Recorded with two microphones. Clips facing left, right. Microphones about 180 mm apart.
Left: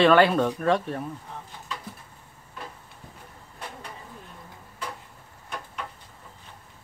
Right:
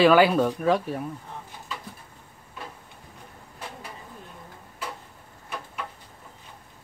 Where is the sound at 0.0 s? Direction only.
5° right (ahead or behind).